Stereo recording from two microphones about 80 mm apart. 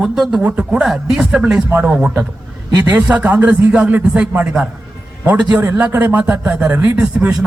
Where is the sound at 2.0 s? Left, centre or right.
Right.